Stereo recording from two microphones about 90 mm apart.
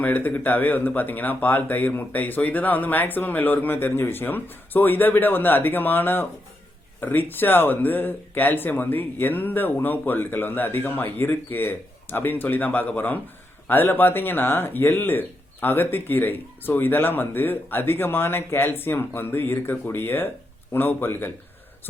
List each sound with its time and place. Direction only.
0.0 s speech: 20° left (ahead or behind)